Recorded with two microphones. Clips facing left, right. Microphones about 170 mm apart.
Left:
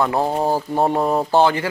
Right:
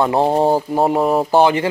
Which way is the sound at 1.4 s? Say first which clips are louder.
Right 3 dB; 20° right (ahead or behind).